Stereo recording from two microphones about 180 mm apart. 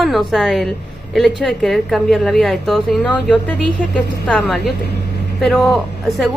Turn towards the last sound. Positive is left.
turn(degrees=0)  # may be behind; listen again after turning